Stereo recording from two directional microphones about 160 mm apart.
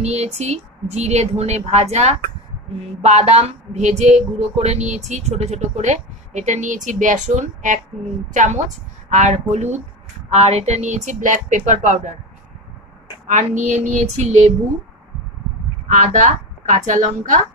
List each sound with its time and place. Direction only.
0.0 s a woman's voice: 45° right (ahead or behind)
13.3 s a woman's voice: 50° right (ahead or behind)
15.9 s a woman's voice: 50° right (ahead or behind)